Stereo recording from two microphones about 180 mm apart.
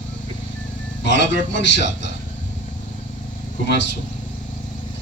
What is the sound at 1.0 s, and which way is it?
A man's voice, 75° left (ahead or behind).